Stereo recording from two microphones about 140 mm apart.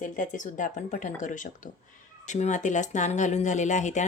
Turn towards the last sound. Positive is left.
turn(degrees=60)  # may be behind; listen again after turning